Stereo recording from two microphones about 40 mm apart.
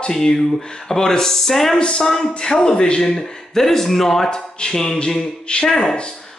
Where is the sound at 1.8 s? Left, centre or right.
Left.